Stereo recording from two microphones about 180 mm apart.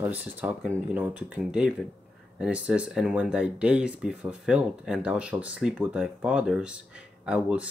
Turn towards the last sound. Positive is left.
turn(degrees=-5)  # may be behind; listen again after turning